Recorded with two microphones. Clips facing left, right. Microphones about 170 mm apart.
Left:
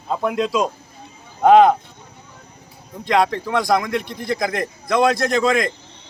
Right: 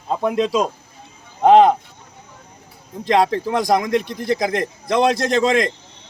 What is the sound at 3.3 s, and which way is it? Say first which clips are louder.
A man's voice: right 1 dB; 40° right (ahead or behind).